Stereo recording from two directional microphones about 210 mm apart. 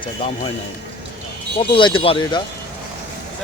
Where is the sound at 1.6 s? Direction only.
25° left (ahead or behind).